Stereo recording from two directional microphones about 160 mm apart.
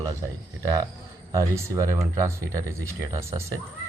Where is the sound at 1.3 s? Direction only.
20° right (ahead or behind).